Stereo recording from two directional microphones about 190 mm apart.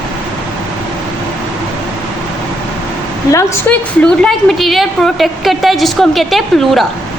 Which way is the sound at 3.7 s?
10° left (ahead or behind).